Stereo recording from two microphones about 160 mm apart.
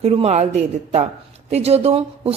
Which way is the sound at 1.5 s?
40° right (ahead or behind).